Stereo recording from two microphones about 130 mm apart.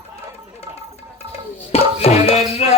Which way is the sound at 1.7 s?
50° left (ahead or behind).